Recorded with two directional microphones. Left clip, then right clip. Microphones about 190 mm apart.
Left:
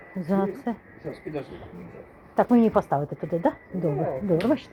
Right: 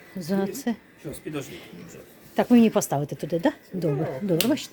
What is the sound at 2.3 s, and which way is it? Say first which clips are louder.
A woman's voice: even; 35° right (ahead or behind).